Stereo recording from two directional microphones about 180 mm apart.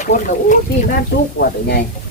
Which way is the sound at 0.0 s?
45° left (ahead or behind).